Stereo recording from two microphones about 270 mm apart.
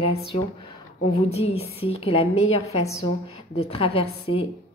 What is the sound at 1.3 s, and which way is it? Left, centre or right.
A woman's voice, left.